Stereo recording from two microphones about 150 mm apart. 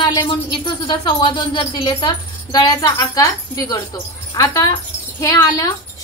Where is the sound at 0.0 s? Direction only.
35° left (ahead or behind).